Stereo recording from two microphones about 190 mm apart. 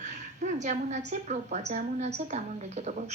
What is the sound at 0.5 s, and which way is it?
A woman's voice, 40° right (ahead or behind).